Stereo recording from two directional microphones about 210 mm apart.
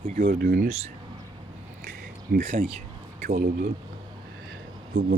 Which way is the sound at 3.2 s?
45° right (ahead or behind).